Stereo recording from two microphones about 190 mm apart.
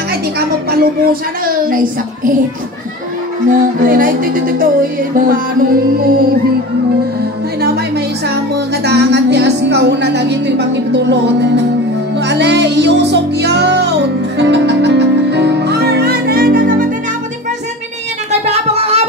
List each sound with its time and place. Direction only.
0.1 s speech: 55° right (ahead or behind)
1.4 s music: 50° right (ahead or behind)
3.4 s music: 45° right (ahead or behind)
7.6 s a woman's voice: 60° right (ahead or behind)
12.2 s music: 65° right (ahead or behind); by 16.8 s 50° right (ahead or behind)
18.5 s a sound: 35° right (ahead or behind)